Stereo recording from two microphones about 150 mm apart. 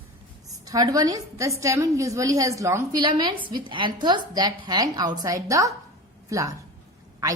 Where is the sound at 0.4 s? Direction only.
25° right (ahead or behind).